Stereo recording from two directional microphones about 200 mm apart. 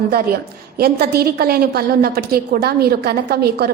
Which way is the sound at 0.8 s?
50° right (ahead or behind).